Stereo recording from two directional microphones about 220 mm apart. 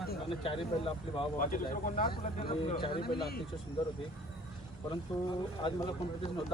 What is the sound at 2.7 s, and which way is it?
Speech, 20° left (ahead or behind).